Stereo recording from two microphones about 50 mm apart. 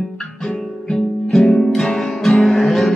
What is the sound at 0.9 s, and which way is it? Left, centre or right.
Music, centre.